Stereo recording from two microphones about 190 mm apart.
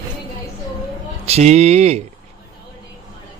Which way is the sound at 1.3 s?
35° right (ahead or behind).